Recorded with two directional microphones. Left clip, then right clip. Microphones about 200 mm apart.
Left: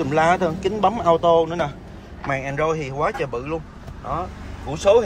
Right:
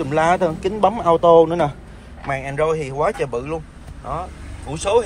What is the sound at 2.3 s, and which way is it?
Speech, 15° left (ahead or behind).